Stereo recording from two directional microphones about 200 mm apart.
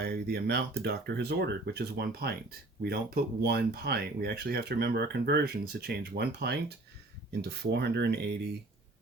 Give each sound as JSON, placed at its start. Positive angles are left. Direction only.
{"t": 0.0, "sound": "speech", "side_deg": -55}